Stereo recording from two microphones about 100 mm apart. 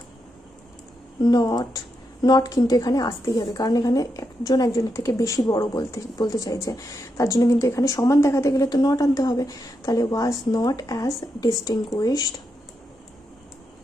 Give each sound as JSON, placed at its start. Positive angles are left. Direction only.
{"t": 1.2, "sound": "a woman's voice", "side_deg": 40}